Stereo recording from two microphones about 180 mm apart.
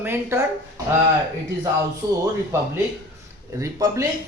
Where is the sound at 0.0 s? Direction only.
15° right (ahead or behind).